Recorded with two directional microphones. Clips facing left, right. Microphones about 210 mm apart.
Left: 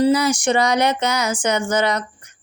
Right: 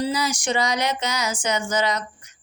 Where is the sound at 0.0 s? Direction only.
60° left (ahead or behind).